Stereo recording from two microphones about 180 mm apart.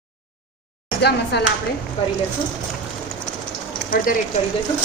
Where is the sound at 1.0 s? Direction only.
65° left (ahead or behind).